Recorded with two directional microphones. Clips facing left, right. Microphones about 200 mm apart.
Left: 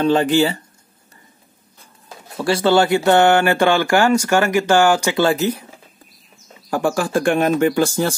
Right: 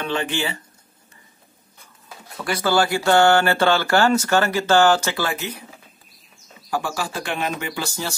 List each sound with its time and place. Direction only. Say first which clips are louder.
0.0 s speech: left 10 dB; 40° left (ahead or behind)
2.3 s speech: left 5 dB; 25° left (ahead or behind)
5.2 s speech: left 9 dB; 35° left (ahead or behind)
6.7 s speech: left 8 dB; 50° left (ahead or behind)